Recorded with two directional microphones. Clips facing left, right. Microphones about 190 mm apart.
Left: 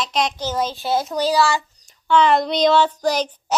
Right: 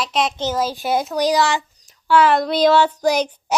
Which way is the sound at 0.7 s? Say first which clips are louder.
Right 1 dB; 15° right (ahead or behind).